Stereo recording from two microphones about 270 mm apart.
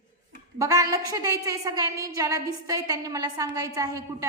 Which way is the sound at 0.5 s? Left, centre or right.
Centre.